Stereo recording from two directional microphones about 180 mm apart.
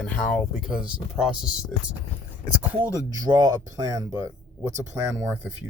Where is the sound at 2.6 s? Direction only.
10° right (ahead or behind).